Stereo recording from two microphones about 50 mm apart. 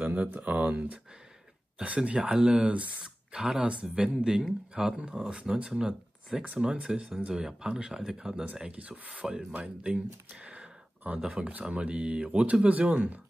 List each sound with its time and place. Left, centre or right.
0.0 s speech: right; by 8.5 s centre
8.7 s speech: right
9.1 s speech: centre
11.4 s speech: right